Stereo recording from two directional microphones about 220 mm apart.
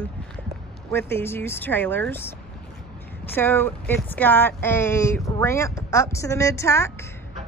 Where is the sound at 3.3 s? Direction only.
10° left (ahead or behind).